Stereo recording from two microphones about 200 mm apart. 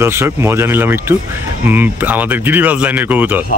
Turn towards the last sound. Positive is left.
turn(degrees=-10)  # may be behind; listen again after turning